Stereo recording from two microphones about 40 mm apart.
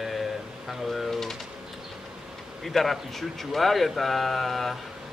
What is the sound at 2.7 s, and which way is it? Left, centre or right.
Speech, centre.